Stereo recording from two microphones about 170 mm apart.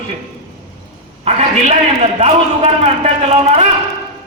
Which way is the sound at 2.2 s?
40° right (ahead or behind).